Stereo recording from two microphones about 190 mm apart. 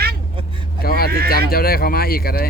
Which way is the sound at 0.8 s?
50° left (ahead or behind).